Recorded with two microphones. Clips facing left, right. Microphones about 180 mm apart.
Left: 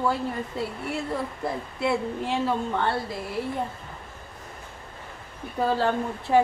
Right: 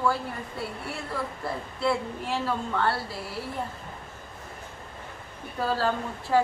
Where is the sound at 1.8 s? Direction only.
20° left (ahead or behind).